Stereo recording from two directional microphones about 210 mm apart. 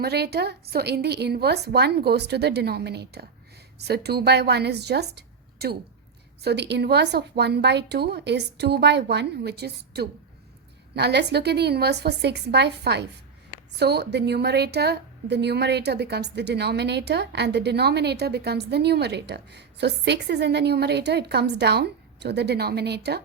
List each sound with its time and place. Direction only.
0.0 s a woman's voice: 50° right (ahead or behind)